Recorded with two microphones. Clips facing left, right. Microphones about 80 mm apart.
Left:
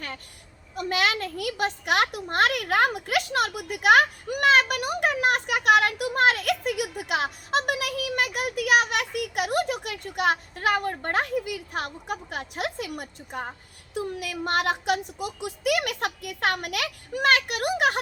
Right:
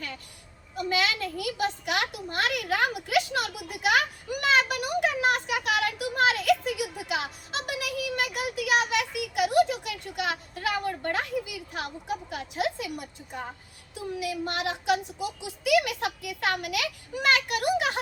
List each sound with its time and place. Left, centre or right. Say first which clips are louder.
0.8 s a child's voice: left 2 dB; left